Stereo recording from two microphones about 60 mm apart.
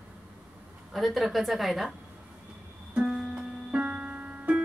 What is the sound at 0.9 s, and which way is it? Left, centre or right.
A woman's voice, centre.